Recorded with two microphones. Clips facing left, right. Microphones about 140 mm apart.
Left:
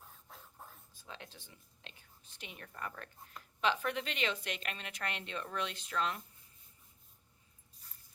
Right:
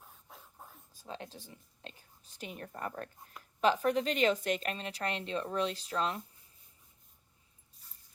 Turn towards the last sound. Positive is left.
turn(degrees=-35)  # may be behind; listen again after turning